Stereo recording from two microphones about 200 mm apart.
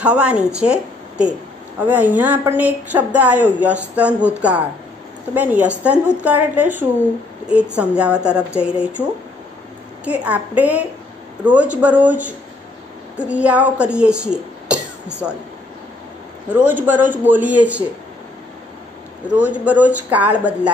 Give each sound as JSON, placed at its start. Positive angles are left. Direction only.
{"t": 0.0, "sound": "speech", "side_deg": -5}
{"t": 10.0, "sound": "speech", "side_deg": -5}
{"t": 16.4, "sound": "speech", "side_deg": -10}
{"t": 19.2, "sound": "speech", "side_deg": -5}